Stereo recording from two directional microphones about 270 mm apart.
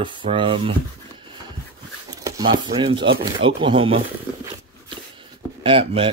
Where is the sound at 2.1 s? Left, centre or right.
Centre.